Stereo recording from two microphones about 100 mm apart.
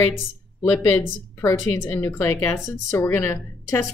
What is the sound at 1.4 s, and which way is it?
Speech, 25° left (ahead or behind).